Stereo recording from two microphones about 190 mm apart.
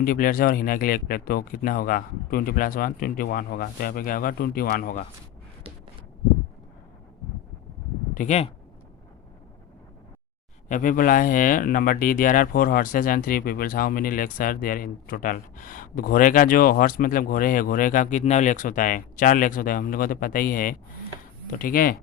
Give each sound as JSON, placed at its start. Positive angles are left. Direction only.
{"t": 0.0, "sound": "speech", "side_deg": 50}
{"t": 8.1, "sound": "speech", "side_deg": 40}
{"t": 10.7, "sound": "speech", "side_deg": 45}